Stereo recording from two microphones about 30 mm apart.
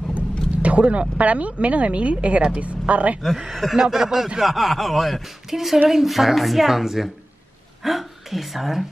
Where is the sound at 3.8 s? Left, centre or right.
Centre.